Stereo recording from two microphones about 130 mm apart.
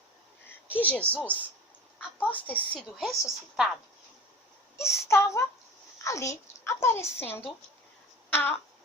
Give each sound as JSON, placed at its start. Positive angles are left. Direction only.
{"t": 0.7, "sound": "speech", "side_deg": 10}
{"t": 3.0, "sound": "a woman's voice", "side_deg": -5}
{"t": 4.8, "sound": "a child's voice", "side_deg": 20}
{"t": 8.3, "sound": "a sound", "side_deg": 15}